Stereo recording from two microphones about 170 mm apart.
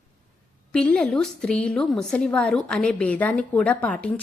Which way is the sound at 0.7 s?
5° left (ahead or behind).